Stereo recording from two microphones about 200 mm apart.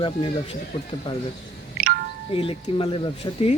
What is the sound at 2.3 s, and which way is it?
Speech, 25° left (ahead or behind).